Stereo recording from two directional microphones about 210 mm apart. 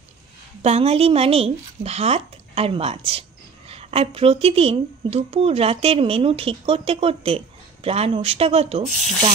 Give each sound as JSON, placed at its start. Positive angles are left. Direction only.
{"t": 0.6, "sound": "a woman's voice", "side_deg": -30}